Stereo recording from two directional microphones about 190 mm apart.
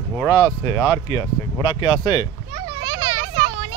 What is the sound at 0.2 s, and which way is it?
Speech, 20° left (ahead or behind).